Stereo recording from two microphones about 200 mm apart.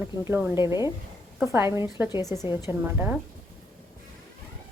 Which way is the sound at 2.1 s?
20° left (ahead or behind).